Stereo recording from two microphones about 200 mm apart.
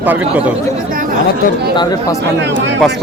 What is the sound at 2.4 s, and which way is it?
Speech, 60° right (ahead or behind).